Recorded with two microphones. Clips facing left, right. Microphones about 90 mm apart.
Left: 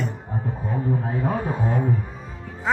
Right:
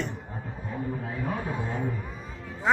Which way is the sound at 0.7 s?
30° left (ahead or behind).